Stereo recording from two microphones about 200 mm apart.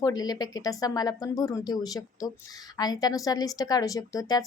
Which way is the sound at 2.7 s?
20° left (ahead or behind).